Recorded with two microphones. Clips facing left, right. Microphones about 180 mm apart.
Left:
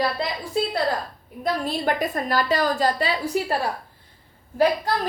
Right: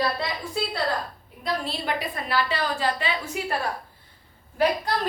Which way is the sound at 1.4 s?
45° left (ahead or behind).